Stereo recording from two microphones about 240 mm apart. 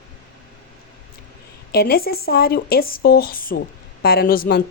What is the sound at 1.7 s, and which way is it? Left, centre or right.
A woman's voice, left.